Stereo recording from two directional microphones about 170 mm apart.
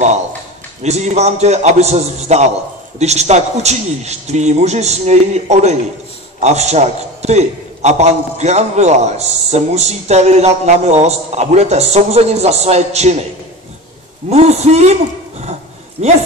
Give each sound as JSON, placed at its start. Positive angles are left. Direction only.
{"t": 0.8, "sound": "a man's voice", "side_deg": -40}
{"t": 14.3, "sound": "a man's voice", "side_deg": -40}